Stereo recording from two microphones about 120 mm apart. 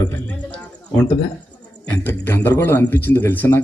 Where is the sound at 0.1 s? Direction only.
15° left (ahead or behind).